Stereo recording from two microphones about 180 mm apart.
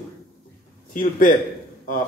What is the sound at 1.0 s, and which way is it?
Speech, 45° left (ahead or behind).